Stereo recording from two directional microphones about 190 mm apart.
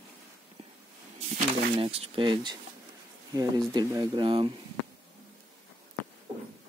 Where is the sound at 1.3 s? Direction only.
30° right (ahead or behind).